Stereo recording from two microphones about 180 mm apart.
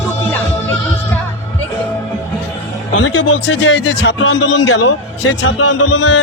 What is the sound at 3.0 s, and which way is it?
Speech, 90° left.